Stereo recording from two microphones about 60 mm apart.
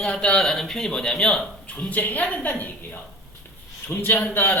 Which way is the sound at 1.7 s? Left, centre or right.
Left.